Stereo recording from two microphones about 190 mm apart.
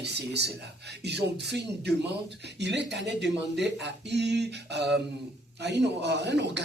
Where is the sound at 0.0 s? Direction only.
65° right (ahead or behind).